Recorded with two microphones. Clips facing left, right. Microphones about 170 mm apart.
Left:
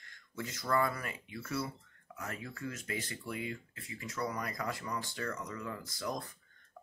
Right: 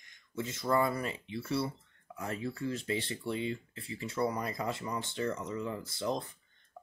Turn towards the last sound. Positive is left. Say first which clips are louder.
# right 5 dB
turn(degrees=-25)  # may be behind; listen again after turning